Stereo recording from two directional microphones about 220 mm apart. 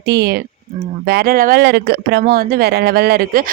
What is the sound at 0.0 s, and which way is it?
Speech, 45° right (ahead or behind).